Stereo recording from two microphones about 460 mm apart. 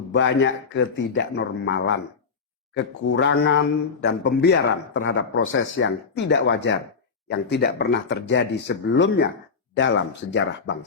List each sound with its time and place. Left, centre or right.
0.1 s speech: left